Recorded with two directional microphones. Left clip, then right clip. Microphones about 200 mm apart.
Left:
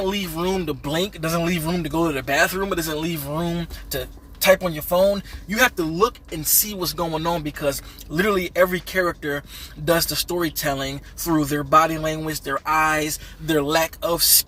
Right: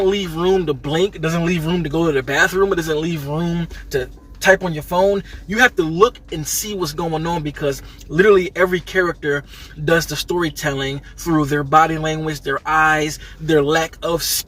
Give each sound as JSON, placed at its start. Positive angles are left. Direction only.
{"t": 0.0, "sound": "speech", "side_deg": 15}